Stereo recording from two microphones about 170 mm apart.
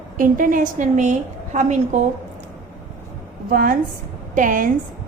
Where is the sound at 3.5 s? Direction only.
55° right (ahead or behind).